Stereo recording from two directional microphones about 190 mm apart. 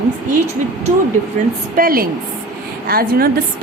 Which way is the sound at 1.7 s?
50° right (ahead or behind).